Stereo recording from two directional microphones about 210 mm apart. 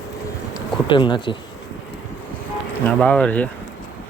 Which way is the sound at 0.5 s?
20° left (ahead or behind).